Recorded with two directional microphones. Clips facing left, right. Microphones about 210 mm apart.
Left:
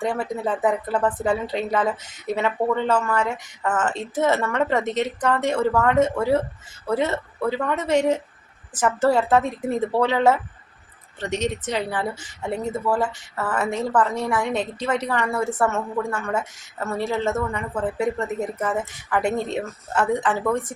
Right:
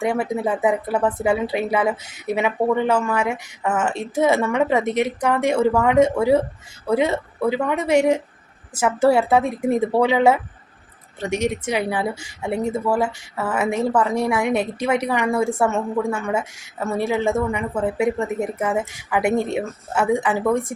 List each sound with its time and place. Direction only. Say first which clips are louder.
0.0 s a woman's voice: right 3 dB; 10° right (ahead or behind)